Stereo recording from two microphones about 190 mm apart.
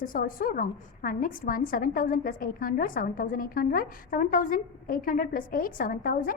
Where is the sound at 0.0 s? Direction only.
45° left (ahead or behind).